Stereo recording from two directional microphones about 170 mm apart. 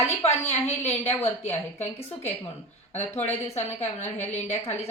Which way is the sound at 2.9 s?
40° left (ahead or behind).